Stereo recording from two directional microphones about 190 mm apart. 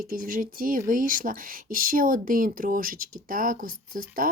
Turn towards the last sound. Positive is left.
turn(degrees=-50)  # may be behind; listen again after turning